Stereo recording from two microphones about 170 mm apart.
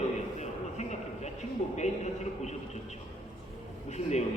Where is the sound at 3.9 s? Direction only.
40° left (ahead or behind).